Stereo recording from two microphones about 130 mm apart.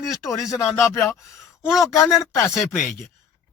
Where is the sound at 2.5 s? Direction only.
Centre (ahead or behind).